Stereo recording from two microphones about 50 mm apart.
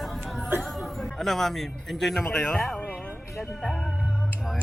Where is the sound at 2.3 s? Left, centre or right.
Centre.